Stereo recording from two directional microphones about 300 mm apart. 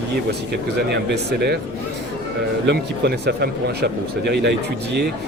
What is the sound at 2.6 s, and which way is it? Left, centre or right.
Speech, right.